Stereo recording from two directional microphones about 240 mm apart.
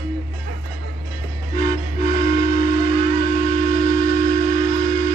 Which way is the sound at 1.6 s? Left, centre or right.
Left.